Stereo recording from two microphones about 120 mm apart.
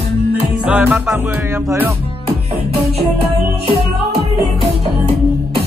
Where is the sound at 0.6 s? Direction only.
10° right (ahead or behind).